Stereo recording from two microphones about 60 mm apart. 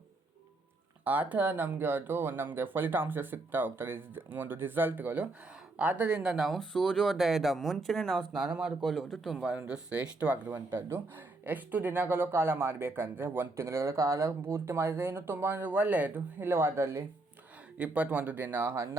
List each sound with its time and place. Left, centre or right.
1.0 s speech: right
5.7 s speech: right; by 6.6 s centre
6.6 s speech: centre
9.6 s speech: centre
10.8 s speech: right
16.4 s speech: right
17.7 s speech: right